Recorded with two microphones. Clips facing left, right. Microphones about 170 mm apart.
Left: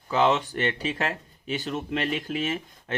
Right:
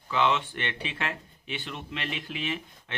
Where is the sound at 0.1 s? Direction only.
40° left (ahead or behind).